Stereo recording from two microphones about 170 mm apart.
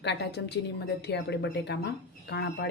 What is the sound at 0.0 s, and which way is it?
Speech, 85° left.